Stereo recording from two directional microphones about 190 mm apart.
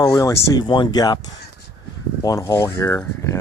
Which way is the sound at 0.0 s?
20° left (ahead or behind).